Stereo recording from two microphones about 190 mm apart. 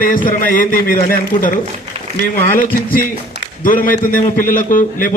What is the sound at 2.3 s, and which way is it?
A man's voice, 50° left (ahead or behind).